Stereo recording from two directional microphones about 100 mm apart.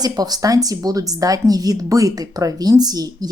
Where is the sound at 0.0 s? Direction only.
40° right (ahead or behind).